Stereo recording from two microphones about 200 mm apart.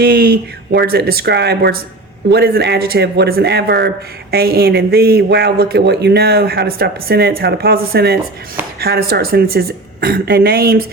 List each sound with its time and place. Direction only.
0.0 s speech: 50° right (ahead or behind)